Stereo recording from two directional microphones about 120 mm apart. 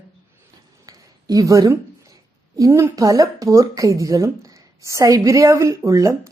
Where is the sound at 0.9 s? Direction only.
30° right (ahead or behind).